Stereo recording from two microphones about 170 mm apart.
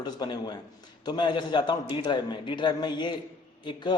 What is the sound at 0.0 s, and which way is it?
A man's voice, 25° left (ahead or behind).